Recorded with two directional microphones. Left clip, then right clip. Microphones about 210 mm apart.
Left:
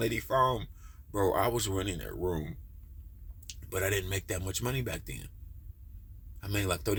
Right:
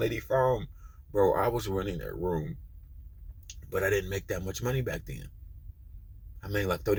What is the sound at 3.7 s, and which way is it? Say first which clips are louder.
Speech: right 4 dB; 20° left (ahead or behind).